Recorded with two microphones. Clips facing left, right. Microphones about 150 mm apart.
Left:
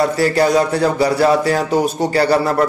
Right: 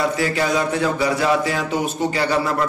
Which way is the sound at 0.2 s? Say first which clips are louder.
Left 6 dB; 40° left (ahead or behind).